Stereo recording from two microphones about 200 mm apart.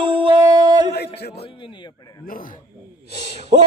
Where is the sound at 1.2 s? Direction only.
50° left (ahead or behind).